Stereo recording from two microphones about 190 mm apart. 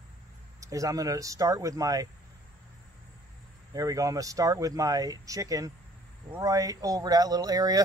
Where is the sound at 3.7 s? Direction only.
20° right (ahead or behind).